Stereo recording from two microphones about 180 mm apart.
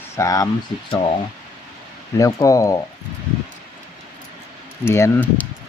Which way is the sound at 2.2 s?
20° left (ahead or behind).